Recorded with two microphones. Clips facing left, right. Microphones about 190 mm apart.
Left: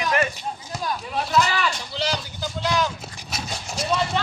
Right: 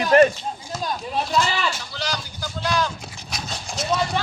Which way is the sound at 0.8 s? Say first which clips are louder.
Right 1 dB; 25° right (ahead or behind).